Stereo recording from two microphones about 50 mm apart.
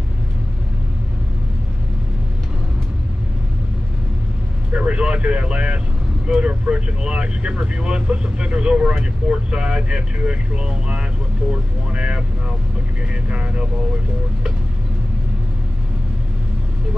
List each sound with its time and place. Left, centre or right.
4.7 s speech: right